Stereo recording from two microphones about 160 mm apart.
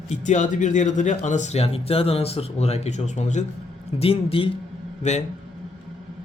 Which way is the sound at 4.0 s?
35° left (ahead or behind).